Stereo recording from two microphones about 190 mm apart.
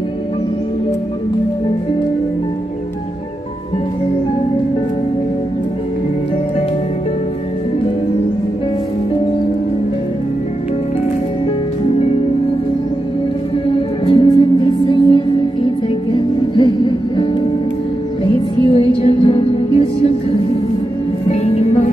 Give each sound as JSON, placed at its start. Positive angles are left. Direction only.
{"t": 13.7, "sound": "music", "side_deg": 30}